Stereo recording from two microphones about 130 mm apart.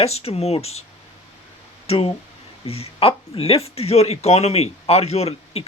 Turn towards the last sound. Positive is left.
turn(degrees=50)  # may be behind; listen again after turning